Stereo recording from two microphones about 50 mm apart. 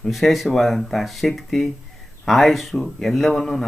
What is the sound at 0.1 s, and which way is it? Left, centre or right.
Speech, centre.